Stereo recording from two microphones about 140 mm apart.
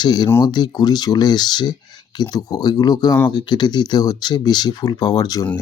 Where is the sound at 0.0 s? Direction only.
30° left (ahead or behind).